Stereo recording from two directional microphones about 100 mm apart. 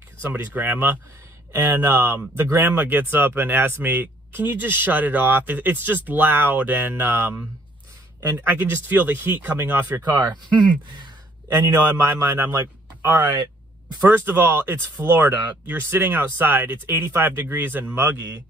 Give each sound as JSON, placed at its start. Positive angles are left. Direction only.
{"t": 0.2, "sound": "speech", "side_deg": -20}
{"t": 10.3, "sound": "speech", "side_deg": -50}
{"t": 11.4, "sound": "speech", "side_deg": -25}
{"t": 18.1, "sound": "speech", "side_deg": -35}